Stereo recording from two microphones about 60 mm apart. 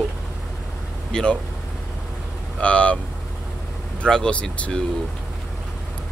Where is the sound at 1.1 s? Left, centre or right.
Centre.